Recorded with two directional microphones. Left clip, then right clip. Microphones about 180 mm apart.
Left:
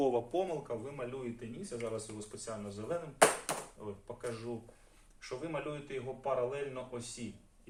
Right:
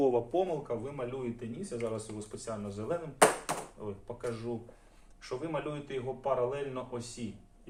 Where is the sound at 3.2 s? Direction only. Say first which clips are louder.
Right 2 dB; centre (ahead or behind).